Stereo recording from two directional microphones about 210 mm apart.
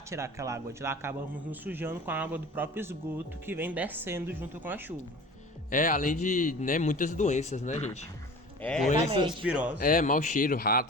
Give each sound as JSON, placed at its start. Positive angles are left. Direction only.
{"t": 0.1, "sound": "a man's voice", "side_deg": -15}
{"t": 5.7, "sound": "a man's voice", "side_deg": 40}
{"t": 8.6, "sound": "speech", "side_deg": 5}
{"t": 9.0, "sound": "speech", "side_deg": -25}
{"t": 9.4, "sound": "speech", "side_deg": -5}
{"t": 9.7, "sound": "a man's voice", "side_deg": 40}